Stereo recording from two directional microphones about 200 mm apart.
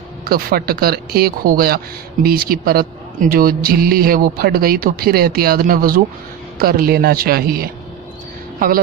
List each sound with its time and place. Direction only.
0.2 s a man's voice: 45° right (ahead or behind)